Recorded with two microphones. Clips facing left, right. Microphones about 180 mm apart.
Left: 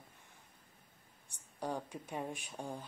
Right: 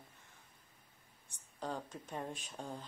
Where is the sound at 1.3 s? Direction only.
15° left (ahead or behind).